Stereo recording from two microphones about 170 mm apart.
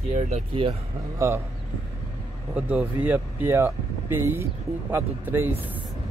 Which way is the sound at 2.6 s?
10° right (ahead or behind).